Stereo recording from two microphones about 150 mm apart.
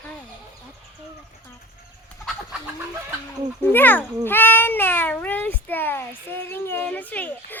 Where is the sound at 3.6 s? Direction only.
10° left (ahead or behind).